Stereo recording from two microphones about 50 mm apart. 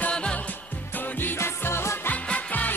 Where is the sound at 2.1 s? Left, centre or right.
Left.